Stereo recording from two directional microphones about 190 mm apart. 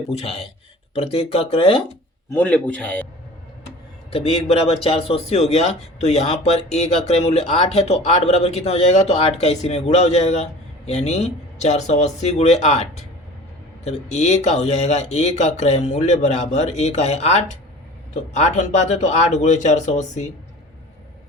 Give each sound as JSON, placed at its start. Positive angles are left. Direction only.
{"t": 0.1, "sound": "a man's voice", "side_deg": 30}
{"t": 2.3, "sound": "a man's voice", "side_deg": 5}
{"t": 4.1, "sound": "a man's voice", "side_deg": 30}